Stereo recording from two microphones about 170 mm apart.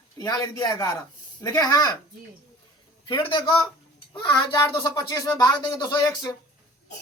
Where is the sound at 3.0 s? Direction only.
30° left (ahead or behind).